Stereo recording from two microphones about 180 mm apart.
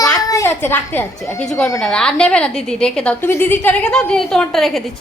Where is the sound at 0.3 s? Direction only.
15° left (ahead or behind).